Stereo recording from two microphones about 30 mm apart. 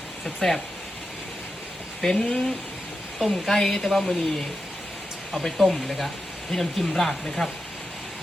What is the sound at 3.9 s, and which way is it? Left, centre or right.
Speech, centre.